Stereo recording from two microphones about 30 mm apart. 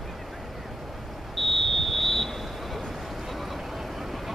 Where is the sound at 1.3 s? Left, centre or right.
Centre.